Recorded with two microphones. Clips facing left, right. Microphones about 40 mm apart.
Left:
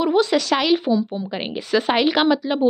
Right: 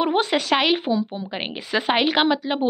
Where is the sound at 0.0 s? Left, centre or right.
Right.